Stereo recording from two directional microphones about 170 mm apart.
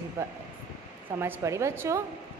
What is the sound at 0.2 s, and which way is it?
A woman's voice, 15° right (ahead or behind).